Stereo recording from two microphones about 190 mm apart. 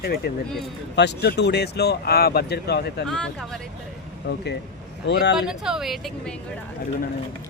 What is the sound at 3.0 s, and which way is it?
Speech, 5° left (ahead or behind).